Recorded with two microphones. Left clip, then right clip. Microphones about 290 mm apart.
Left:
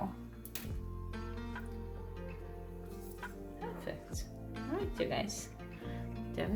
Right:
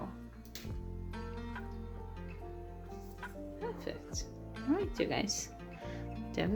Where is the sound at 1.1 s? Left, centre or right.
Centre.